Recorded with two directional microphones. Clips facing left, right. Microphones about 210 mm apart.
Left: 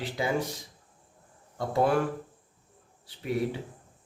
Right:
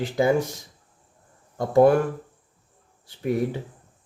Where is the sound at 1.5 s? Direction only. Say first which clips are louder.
Right 9 dB; 45° right (ahead or behind).